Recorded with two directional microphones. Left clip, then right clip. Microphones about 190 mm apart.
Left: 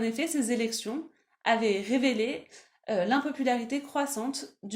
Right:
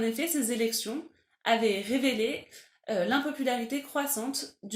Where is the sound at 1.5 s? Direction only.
40° left (ahead or behind).